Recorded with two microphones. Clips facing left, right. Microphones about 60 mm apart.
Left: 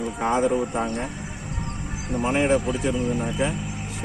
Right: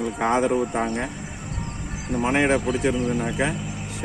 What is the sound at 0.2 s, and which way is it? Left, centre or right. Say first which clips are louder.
Speech: right 1 dB; right.